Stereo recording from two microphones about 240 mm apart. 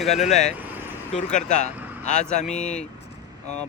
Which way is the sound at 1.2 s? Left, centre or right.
Left.